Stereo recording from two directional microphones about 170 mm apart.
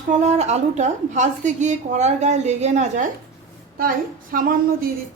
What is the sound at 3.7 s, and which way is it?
Speech, 55° right (ahead or behind).